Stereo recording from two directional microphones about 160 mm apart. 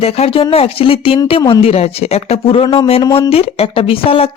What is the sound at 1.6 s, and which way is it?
Speech, 40° left (ahead or behind).